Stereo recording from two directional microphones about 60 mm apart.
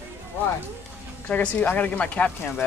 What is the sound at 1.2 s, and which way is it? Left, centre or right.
A woman's voice, left.